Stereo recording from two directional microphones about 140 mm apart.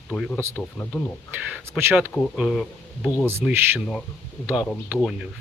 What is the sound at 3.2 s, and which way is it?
Speech, 15° right (ahead or behind).